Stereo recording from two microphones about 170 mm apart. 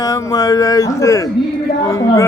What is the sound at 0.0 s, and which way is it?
A man's voice, 20° left (ahead or behind).